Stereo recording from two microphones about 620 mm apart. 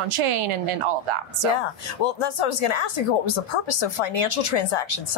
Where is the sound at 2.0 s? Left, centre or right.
Left.